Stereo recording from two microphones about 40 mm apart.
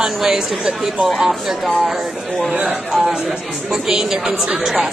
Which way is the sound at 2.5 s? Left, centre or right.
Right.